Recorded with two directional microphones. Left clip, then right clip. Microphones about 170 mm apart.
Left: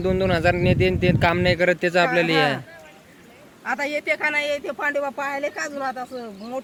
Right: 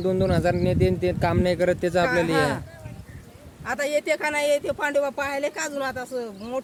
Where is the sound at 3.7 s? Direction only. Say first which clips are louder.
Even; 90° right; by 5.6 s 50° right (ahead or behind).